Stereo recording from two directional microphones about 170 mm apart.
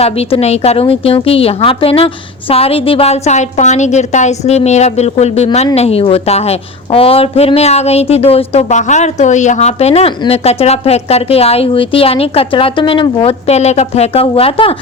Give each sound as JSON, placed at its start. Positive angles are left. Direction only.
{"t": 0.0, "sound": "a woman's voice", "side_deg": 35}